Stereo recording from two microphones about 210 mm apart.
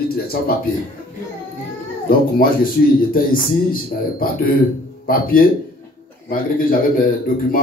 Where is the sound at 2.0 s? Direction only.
45° left (ahead or behind).